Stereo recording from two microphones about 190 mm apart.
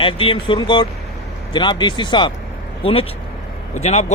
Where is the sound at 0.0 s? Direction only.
30° left (ahead or behind).